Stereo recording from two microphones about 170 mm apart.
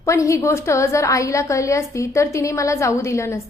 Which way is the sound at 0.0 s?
15° left (ahead or behind).